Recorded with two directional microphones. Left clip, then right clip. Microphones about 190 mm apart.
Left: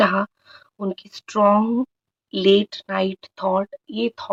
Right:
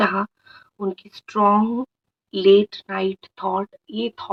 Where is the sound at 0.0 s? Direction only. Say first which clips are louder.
Left 2 dB; 30° left (ahead or behind).